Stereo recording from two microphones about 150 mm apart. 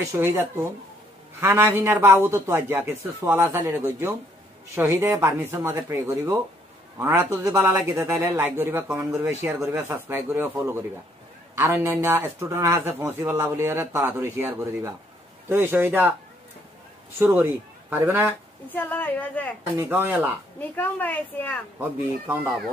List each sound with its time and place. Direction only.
0.1 s a man's voice: 15° right (ahead or behind)
17.2 s a man's voice: 15° right (ahead or behind)
18.7 s a woman's voice: 10° left (ahead or behind)
19.8 s a man's voice: 15° right (ahead or behind)
20.5 s a woman's voice: 10° left (ahead or behind)
22.3 s a man's voice: 10° right (ahead or behind)